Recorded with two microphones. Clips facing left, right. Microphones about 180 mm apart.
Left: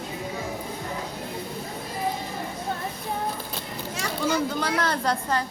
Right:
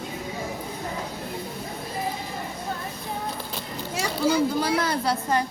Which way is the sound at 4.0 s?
10° right (ahead or behind).